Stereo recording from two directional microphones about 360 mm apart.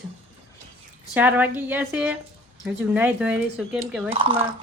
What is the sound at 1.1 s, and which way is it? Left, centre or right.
Speech, centre.